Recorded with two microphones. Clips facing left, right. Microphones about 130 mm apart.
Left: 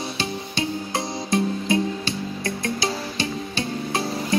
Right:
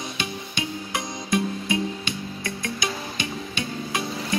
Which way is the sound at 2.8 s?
35° left (ahead or behind).